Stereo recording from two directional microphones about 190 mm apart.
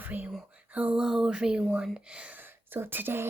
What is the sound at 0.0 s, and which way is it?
Speech, 10° right (ahead or behind).